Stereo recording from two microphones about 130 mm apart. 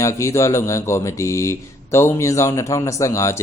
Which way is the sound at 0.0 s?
25° left (ahead or behind).